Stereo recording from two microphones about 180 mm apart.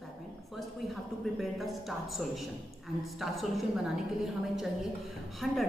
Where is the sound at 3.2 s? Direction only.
Centre (ahead or behind).